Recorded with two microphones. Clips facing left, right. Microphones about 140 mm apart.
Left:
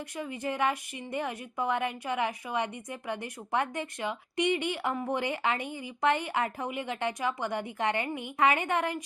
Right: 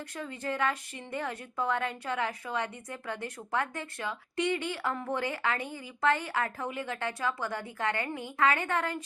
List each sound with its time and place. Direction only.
0.2 s a woman's voice: 15° left (ahead or behind)